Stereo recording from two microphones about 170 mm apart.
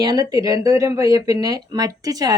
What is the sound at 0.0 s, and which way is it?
A woman's voice, 25° right (ahead or behind).